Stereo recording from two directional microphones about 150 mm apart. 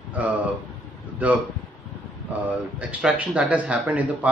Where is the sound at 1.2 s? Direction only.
10° right (ahead or behind).